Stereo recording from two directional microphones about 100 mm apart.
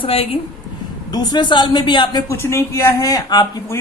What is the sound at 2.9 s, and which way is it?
Speech, 40° left (ahead or behind).